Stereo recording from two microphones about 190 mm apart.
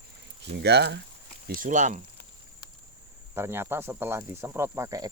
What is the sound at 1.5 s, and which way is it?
Speech, 45° right (ahead or behind).